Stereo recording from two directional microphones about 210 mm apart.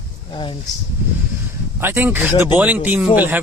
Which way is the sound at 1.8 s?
10° right (ahead or behind).